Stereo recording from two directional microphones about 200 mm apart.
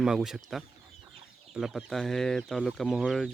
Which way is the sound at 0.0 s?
5° right (ahead or behind).